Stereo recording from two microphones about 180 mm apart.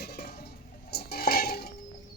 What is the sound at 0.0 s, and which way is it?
Dishes, 60° left (ahead or behind).